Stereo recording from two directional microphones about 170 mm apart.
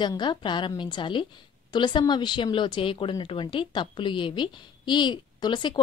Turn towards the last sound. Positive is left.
turn(degrees=25)  # may be behind; listen again after turning